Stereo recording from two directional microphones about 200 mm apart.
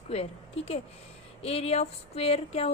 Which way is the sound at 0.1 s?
30° left (ahead or behind).